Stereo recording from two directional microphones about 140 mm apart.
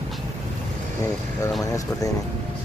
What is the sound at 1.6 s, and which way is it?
Speech, 25° left (ahead or behind).